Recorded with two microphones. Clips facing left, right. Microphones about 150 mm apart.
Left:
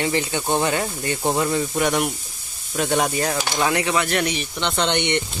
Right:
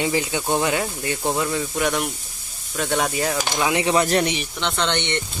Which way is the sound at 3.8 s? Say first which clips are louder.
Right 3 dB; 35° right (ahead or behind).